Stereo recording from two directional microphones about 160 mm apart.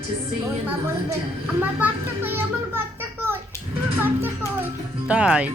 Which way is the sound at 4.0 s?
10° right (ahead or behind).